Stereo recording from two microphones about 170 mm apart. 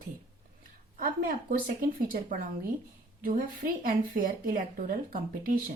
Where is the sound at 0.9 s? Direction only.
55° right (ahead or behind).